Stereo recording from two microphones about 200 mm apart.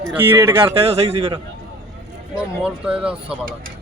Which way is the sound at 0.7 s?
30° right (ahead or behind).